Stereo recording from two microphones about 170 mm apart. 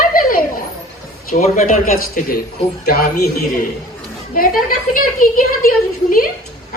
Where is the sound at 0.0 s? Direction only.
55° left (ahead or behind).